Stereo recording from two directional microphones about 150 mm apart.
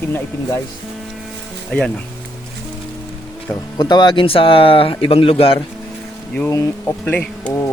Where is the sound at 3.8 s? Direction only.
30° left (ahead or behind).